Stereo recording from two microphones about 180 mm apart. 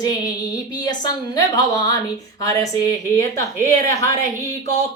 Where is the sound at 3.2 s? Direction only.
20° left (ahead or behind).